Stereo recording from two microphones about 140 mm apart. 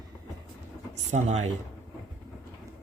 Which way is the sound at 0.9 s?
55° right (ahead or behind).